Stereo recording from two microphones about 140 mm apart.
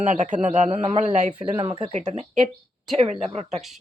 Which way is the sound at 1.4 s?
35° right (ahead or behind).